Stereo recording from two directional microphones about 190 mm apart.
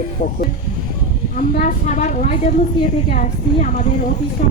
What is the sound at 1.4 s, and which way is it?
A woman's voice, 45° left (ahead or behind).